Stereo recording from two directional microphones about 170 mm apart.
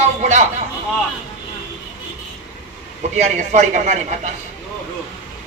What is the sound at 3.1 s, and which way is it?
A man's voice, 45° right (ahead or behind).